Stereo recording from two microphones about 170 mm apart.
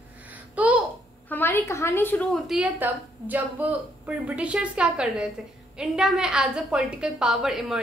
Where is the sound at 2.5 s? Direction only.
10° right (ahead or behind).